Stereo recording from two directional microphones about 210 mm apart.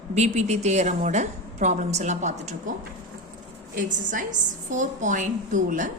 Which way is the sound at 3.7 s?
40° right (ahead or behind).